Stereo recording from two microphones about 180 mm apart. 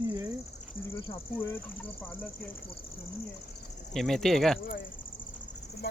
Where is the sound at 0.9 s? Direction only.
30° left (ahead or behind).